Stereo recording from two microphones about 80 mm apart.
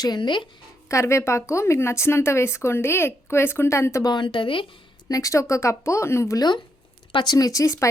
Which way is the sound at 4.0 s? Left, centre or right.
Left.